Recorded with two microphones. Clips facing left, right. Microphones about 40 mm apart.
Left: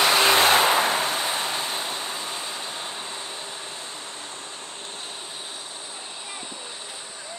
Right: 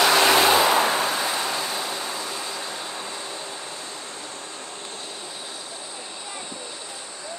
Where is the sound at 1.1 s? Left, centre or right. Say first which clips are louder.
Right 1 dB; left.